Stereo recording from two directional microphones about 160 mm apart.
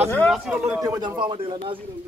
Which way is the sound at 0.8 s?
20° right (ahead or behind).